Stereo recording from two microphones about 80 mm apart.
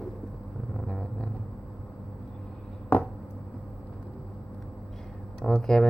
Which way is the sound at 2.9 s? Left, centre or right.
Left.